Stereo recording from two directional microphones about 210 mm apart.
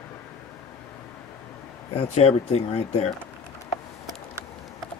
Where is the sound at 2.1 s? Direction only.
30° left (ahead or behind).